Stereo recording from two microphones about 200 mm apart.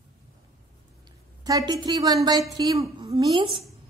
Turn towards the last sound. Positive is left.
turn(degrees=-25)  # may be behind; listen again after turning